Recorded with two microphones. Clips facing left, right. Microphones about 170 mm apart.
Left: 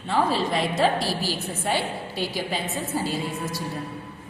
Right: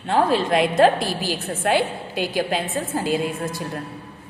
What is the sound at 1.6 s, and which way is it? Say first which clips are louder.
Speech: right 6 dB; 70° right (ahead or behind).